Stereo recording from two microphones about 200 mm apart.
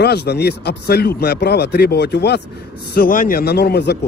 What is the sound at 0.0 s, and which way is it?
Speech, 55° left (ahead or behind).